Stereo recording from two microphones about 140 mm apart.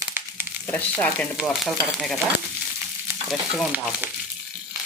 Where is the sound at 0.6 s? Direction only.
15° left (ahead or behind).